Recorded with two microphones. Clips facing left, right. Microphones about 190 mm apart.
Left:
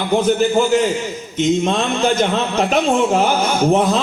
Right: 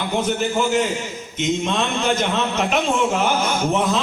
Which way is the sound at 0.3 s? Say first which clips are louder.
Left 5 dB; 35° left (ahead or behind).